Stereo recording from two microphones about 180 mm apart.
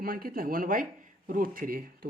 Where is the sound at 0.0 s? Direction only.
55° right (ahead or behind).